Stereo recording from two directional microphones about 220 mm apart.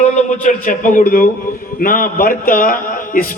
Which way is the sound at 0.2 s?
35° left (ahead or behind).